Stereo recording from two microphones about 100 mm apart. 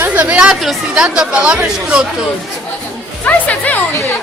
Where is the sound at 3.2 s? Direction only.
15° left (ahead or behind).